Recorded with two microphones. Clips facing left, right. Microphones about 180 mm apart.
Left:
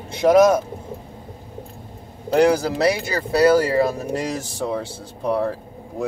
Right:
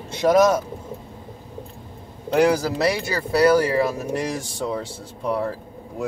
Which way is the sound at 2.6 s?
25° left (ahead or behind).